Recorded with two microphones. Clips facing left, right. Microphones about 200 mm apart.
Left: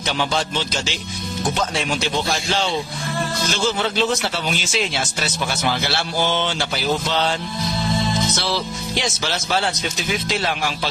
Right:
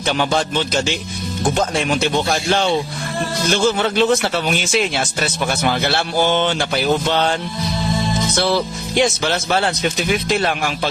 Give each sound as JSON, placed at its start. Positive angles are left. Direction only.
{"t": 0.2, "sound": "speech", "side_deg": -55}
{"t": 8.4, "sound": "speech", "side_deg": -55}